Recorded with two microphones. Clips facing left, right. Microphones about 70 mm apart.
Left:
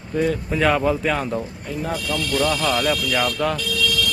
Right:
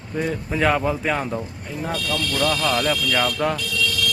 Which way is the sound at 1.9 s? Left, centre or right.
Centre.